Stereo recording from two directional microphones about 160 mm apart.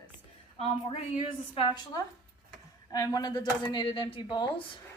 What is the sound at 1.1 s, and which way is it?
Speech, 35° left (ahead or behind).